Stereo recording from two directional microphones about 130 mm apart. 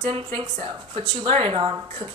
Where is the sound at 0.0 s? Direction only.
40° right (ahead or behind).